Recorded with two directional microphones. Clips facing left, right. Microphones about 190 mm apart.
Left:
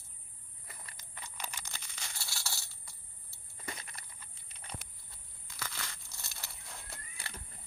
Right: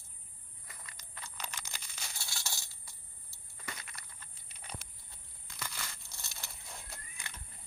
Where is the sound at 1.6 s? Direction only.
10° right (ahead or behind).